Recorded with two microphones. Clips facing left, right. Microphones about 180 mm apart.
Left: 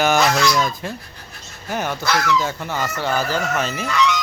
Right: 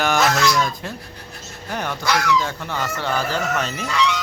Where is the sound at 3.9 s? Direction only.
30° right (ahead or behind).